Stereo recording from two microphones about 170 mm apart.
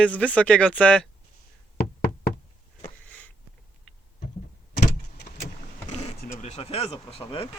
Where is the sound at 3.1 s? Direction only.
10° left (ahead or behind).